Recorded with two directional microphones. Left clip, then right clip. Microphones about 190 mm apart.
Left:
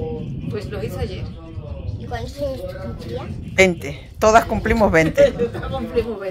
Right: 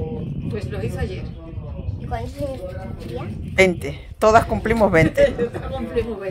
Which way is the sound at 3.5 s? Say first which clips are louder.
Left 1 dB; 10° right (ahead or behind).